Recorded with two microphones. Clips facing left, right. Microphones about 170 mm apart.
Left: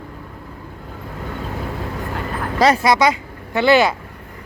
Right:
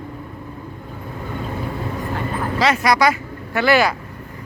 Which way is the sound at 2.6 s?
35° left (ahead or behind).